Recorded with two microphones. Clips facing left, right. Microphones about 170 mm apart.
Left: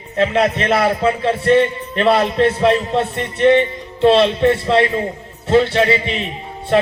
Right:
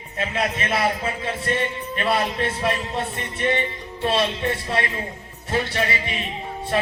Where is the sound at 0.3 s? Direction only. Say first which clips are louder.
Left 6 dB; 65° left (ahead or behind).